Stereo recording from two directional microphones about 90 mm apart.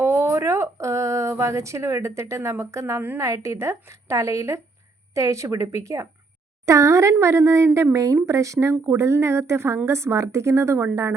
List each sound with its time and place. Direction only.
0.0 s a woman's voice: 30° right (ahead or behind)